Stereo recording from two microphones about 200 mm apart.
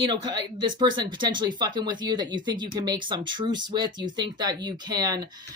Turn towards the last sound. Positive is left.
turn(degrees=-20)  # may be behind; listen again after turning